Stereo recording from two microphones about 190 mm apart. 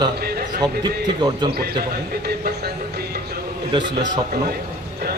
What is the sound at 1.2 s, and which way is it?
Speech, 25° right (ahead or behind).